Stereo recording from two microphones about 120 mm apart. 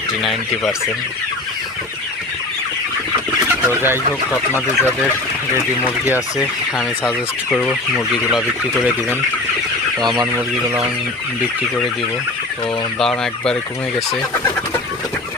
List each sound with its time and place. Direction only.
0.2 s fowl: centre (ahead or behind)
3.5 s speech: 20° right (ahead or behind)
4.3 s speech: 20° left (ahead or behind)
6.4 s fowl: 5° right (ahead or behind)
13.0 s fowl: 5° left (ahead or behind)